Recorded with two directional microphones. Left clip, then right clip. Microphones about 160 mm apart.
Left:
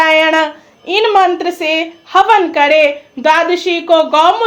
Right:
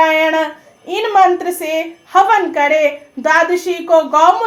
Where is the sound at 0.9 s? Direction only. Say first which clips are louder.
Left 1 dB; 20° left (ahead or behind).